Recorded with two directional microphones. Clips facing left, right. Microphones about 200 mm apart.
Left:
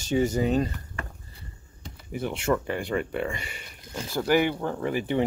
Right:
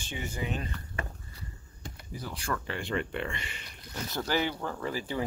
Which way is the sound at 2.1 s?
25° left (ahead or behind).